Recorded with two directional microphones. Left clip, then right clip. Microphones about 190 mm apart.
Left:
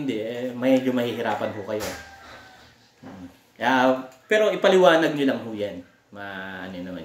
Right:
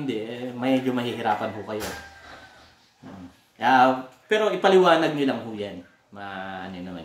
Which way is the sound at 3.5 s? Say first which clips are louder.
Right 2 dB; 5° right (ahead or behind).